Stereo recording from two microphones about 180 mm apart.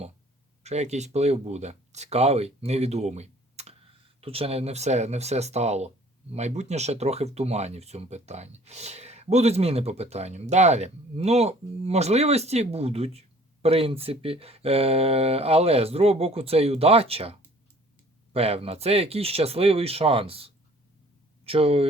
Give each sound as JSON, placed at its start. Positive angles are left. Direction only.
{"t": 0.6, "sound": "speech", "side_deg": -40}
{"t": 18.3, "sound": "speech", "side_deg": -35}